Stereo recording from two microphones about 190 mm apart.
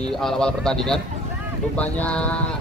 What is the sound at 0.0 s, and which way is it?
Speech, 5° left (ahead or behind).